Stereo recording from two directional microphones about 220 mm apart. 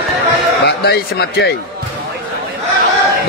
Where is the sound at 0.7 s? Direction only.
50° left (ahead or behind).